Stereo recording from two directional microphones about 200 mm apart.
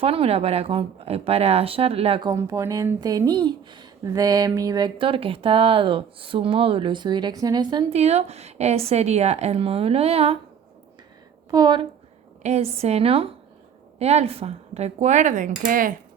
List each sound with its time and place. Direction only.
0.0 s speech: 30° right (ahead or behind)
2.3 s speech: 15° right (ahead or behind); by 10.3 s 30° right (ahead or behind)
11.5 s speech: 20° right (ahead or behind)
12.4 s speech: 30° right (ahead or behind)